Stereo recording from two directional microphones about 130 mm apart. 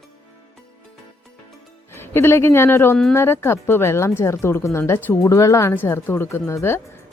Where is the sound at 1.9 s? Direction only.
20° left (ahead or behind).